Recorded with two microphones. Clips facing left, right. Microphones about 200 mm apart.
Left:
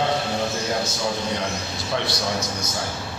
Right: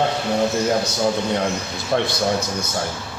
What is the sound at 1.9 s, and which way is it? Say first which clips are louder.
Speech: right 6 dB; 50° right (ahead or behind).